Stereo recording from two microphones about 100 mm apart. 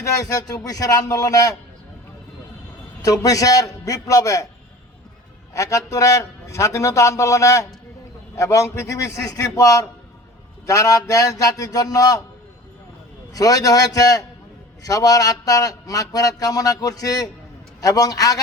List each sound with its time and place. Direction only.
0.0 s a man's voice: 35° left (ahead or behind)
3.0 s a man's voice: 35° left (ahead or behind)
5.5 s a man's voice: 30° left (ahead or behind)
13.3 s a man's voice: 35° left (ahead or behind)